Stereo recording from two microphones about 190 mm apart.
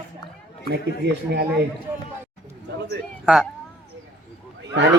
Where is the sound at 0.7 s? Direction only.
60° right (ahead or behind).